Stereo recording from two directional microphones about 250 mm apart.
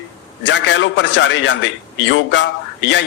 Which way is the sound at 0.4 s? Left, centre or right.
Left.